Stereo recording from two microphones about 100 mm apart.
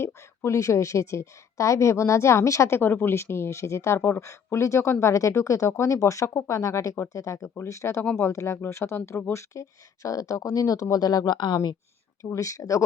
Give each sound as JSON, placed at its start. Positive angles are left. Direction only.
{"t": 0.0, "sound": "a woman's voice", "side_deg": 30}